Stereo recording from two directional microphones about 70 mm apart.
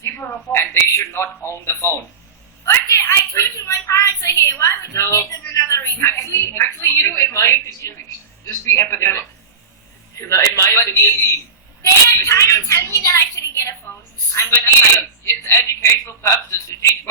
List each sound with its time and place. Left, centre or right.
0.5 s a woman's voice: left